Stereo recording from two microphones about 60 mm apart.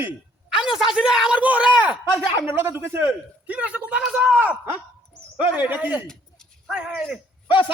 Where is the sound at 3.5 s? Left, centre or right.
Right.